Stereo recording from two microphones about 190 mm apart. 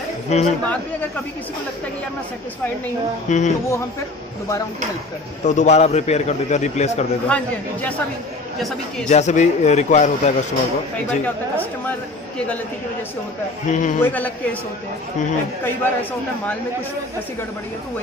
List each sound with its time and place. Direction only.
0.3 s a man's voice: 35° left (ahead or behind)
3.3 s a man's voice: 40° left (ahead or behind)
5.4 s a man's voice: 40° left (ahead or behind)
7.2 s speech: 5° left (ahead or behind)
9.1 s a man's voice: 40° left (ahead or behind)
13.7 s a man's voice: 40° left (ahead or behind)
14.0 s speech: 10° left (ahead or behind)
15.6 s speech: 10° left (ahead or behind)